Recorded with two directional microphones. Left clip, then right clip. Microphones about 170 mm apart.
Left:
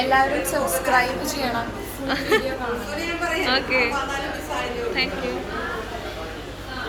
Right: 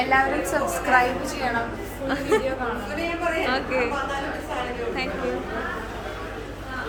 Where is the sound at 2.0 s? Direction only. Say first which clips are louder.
Left 2 dB; 5° right (ahead or behind).